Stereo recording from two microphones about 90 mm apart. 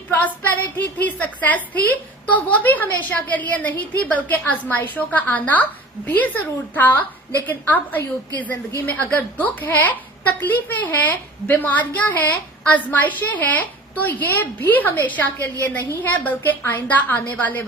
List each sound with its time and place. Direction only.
0.1 s a woman's voice: 20° left (ahead or behind)